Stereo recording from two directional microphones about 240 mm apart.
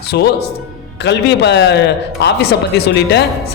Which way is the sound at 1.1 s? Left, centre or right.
Left.